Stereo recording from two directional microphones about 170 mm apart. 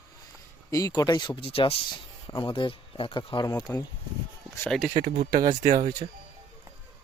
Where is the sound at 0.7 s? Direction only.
20° left (ahead or behind).